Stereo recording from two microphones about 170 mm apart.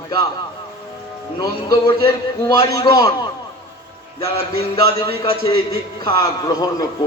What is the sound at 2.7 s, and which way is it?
Speech, 25° left (ahead or behind).